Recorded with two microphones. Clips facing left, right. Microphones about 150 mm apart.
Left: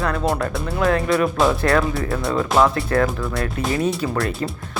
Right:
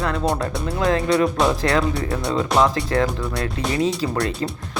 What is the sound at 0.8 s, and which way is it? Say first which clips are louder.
Speech: even; 25° right (ahead or behind).